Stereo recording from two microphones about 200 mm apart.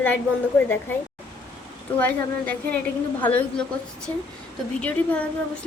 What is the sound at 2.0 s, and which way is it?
A woman's voice, 10° left (ahead or behind).